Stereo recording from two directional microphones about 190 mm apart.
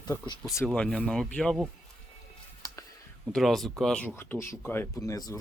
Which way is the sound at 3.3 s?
Centre (ahead or behind).